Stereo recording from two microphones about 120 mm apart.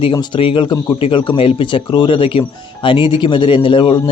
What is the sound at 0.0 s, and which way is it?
A man's voice, 45° left (ahead or behind).